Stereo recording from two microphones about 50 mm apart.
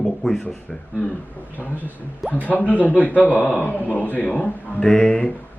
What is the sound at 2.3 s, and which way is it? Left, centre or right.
A man's voice, left.